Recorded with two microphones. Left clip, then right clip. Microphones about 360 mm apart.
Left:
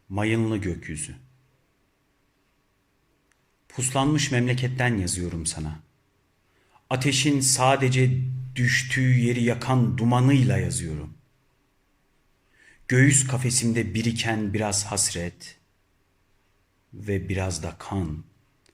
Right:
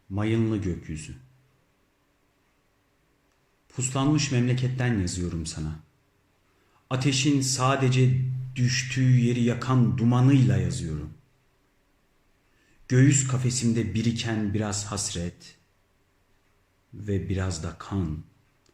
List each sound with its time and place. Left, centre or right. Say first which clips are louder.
0.1 s a man's voice: left 2 dB; left
3.7 s a man's voice: left 2 dB; left
6.8 s a man's voice: left 2 dB; left
12.9 s a man's voice: left 3 dB; left
17.1 s a man's voice: left 3 dB; left